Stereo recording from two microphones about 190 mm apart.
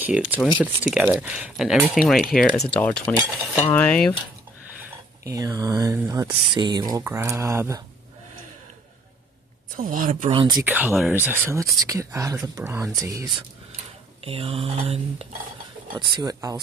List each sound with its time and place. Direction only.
0.0 s speech: 10° right (ahead or behind); by 3.2 s 5° left (ahead or behind)
3.7 s cutlery: 5° left (ahead or behind)
4.7 s speech: 15° right (ahead or behind)
9.8 s speech: 45° right (ahead or behind)
10.3 s speech: 25° right (ahead or behind)
10.6 s speech: 10° right (ahead or behind)